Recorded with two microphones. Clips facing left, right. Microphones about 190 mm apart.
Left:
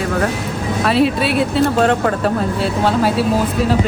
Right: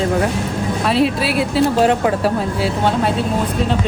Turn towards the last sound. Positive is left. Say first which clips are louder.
# left 3 dB
turn(degrees=5)  # may be behind; listen again after turning